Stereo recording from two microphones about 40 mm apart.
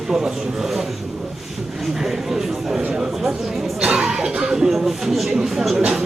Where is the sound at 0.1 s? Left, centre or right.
Centre.